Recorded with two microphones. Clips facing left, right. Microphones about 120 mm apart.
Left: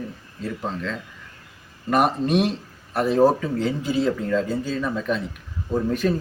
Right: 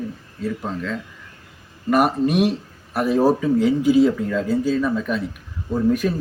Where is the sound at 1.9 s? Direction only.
5° right (ahead or behind).